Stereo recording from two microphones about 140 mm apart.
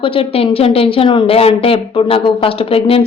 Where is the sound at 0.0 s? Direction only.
40° left (ahead or behind).